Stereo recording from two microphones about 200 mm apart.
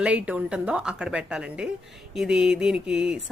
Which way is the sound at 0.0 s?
5° right (ahead or behind).